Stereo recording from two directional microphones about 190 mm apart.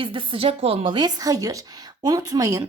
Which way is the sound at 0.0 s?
25° right (ahead or behind).